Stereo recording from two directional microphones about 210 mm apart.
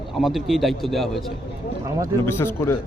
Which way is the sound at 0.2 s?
Centre (ahead or behind).